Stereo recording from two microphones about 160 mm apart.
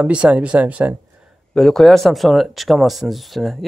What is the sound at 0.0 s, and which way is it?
Speech, 10° right (ahead or behind).